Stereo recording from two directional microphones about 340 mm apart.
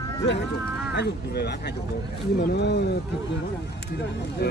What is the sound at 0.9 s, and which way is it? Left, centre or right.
Speech, left.